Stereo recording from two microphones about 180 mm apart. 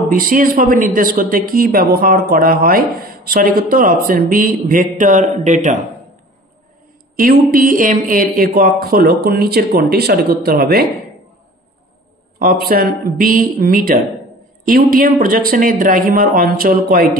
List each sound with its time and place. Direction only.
0.1 s speech: 50° right (ahead or behind)
7.2 s speech: 55° right (ahead or behind)
12.4 s speech: 55° right (ahead or behind)